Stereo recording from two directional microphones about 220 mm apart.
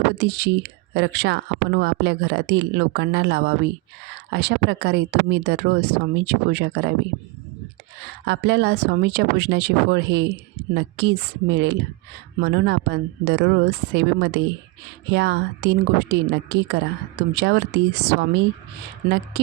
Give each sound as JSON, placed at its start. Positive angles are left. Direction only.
{"t": 0.2, "sound": "speech", "side_deg": -50}
{"t": 8.2, "sound": "speech", "side_deg": -50}